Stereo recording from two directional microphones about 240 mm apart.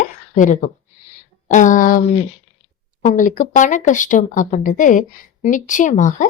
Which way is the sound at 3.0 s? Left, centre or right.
Left.